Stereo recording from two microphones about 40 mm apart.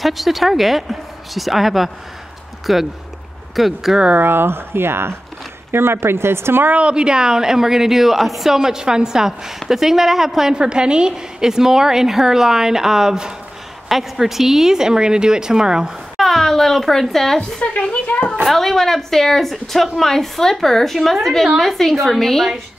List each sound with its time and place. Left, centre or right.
0.0 s speech: centre
4.2 s speech: right
6.7 s a woman's voice: right; by 8.5 s centre
8.5 s a woman's voice: centre
10.5 s a woman's voice: right
16.2 s a child's voice: centre
17.6 s a woman's voice: left
18.5 s a woman's voice: centre